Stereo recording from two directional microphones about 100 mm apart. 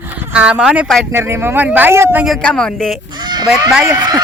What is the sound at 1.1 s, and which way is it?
Speech, 25° right (ahead or behind).